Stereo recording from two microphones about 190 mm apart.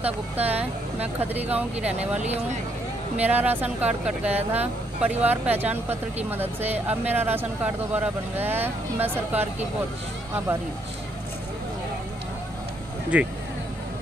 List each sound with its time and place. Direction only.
0.4 s speech: 10° right (ahead or behind)
2.0 s speech: 35° right (ahead or behind)
3.2 s speech: 10° right (ahead or behind)
13.1 s speech: 5° right (ahead or behind)